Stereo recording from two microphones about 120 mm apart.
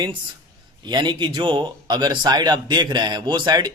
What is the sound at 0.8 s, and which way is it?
A man's voice, 40° right (ahead or behind).